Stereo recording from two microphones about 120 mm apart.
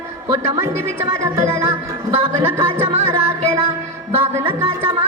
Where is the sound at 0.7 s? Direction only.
70° right (ahead or behind).